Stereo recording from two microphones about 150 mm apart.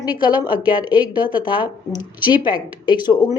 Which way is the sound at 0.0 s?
30° left (ahead or behind).